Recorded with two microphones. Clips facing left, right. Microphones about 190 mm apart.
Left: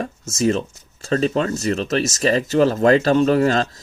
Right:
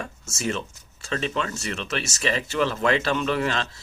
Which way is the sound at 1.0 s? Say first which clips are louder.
Left 8 dB; 40° left (ahead or behind).